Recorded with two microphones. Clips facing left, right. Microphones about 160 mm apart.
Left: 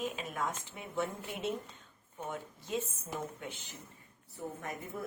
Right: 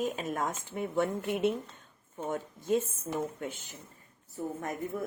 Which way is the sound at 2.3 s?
50° right (ahead or behind).